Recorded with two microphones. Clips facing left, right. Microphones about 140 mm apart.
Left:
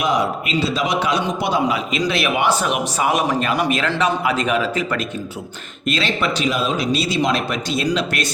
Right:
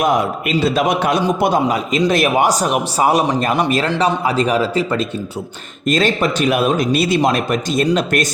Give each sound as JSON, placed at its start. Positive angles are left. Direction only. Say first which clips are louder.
{"t": 0.0, "sound": "a man's voice", "louder": "right 3 dB", "side_deg": -50}
{"t": 5.8, "sound": "a man's voice", "louder": "right 5 dB", "side_deg": -45}